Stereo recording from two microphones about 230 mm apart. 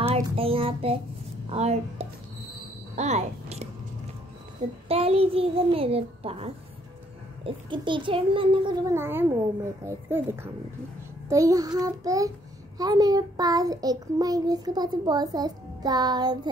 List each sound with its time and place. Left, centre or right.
0.1 s child singing: right
1.5 s a child's voice: right
3.0 s a sound: right
4.8 s a child's voice: right